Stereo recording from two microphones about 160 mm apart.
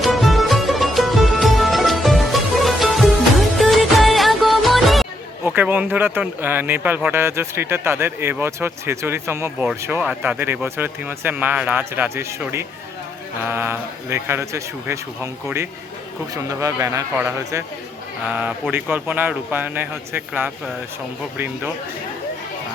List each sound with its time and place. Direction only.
0.0 s music: centre (ahead or behind)
5.5 s speech: 10° right (ahead or behind)
16.3 s speech: 20° right (ahead or behind)